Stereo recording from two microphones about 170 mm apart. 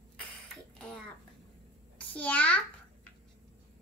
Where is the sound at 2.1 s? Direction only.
10° left (ahead or behind).